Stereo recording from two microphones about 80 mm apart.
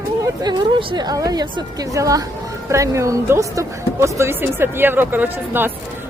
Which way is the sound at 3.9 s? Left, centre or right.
Right.